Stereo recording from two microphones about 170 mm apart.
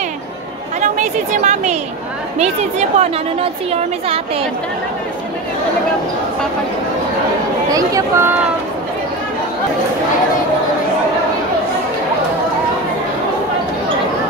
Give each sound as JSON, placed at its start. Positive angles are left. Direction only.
{"t": 0.7, "sound": "a woman's voice", "side_deg": -45}
{"t": 7.7, "sound": "speech", "side_deg": -15}